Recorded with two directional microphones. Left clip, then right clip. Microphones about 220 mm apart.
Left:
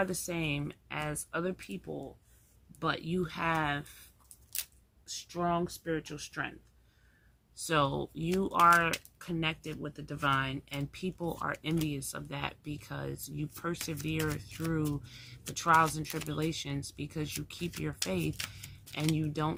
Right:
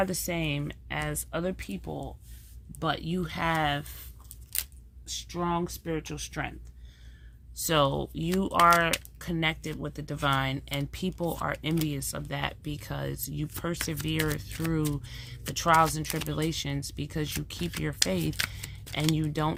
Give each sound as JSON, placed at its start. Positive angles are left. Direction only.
{"t": 0.0, "sound": "speech", "side_deg": -30}
{"t": 5.0, "sound": "speech", "side_deg": -30}
{"t": 7.7, "sound": "speech", "side_deg": -35}
{"t": 18.3, "sound": "camera", "side_deg": -20}
{"t": 18.9, "sound": "speech", "side_deg": -35}